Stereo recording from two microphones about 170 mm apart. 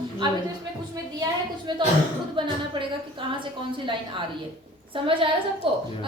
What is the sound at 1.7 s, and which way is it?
A woman's voice, 25° right (ahead or behind).